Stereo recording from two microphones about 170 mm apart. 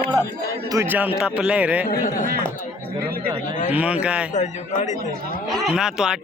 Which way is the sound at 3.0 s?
65° right (ahead or behind).